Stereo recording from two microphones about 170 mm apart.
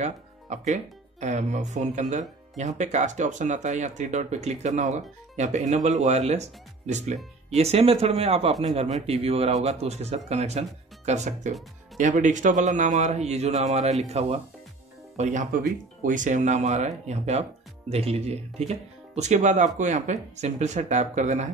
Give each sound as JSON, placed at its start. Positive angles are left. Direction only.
{"t": 0.0, "sound": "speech", "side_deg": -40}